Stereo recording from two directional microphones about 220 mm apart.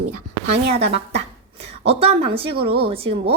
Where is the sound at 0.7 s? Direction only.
25° right (ahead or behind).